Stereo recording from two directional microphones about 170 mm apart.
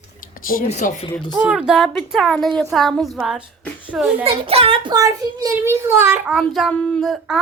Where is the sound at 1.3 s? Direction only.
5° right (ahead or behind).